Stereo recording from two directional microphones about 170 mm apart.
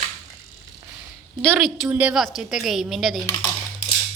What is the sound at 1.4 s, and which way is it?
A woman's voice, centre (ahead or behind).